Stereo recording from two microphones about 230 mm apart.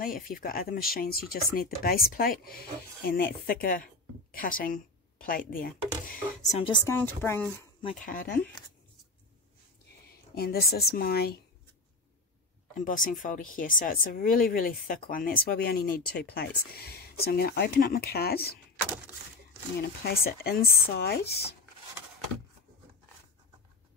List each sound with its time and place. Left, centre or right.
0.0 s a woman's voice: left
6.9 s speech: centre
7.8 s speech: left
10.3 s speech: left
12.7 s speech: left
19.8 s speech: left